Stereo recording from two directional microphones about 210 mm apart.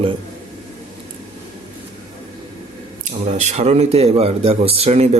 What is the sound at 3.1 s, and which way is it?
Speech, 35° right (ahead or behind).